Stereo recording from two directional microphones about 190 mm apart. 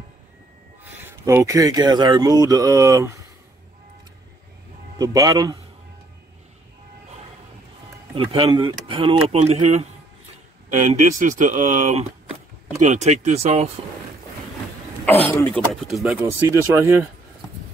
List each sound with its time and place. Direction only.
1.2 s speech: 15° right (ahead or behind)
4.9 s speech: 20° right (ahead or behind)
8.1 s speech: 25° right (ahead or behind)
15.5 s speech: centre (ahead or behind)